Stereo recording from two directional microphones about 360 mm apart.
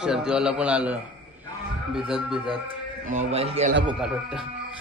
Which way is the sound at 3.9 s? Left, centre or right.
Centre.